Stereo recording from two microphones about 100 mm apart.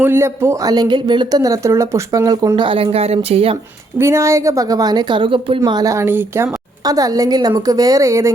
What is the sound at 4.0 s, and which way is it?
A woman's voice, 25° right (ahead or behind).